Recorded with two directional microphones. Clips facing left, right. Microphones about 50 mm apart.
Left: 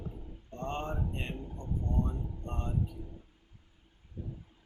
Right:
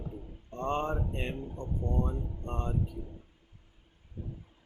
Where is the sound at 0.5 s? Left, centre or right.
Right.